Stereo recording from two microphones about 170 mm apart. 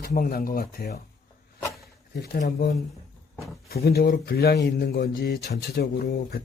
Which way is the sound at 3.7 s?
65° left (ahead or behind).